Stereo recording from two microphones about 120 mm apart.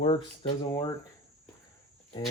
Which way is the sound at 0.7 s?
30° left (ahead or behind).